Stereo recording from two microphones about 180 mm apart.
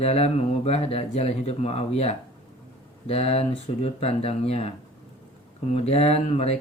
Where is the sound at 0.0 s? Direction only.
35° left (ahead or behind).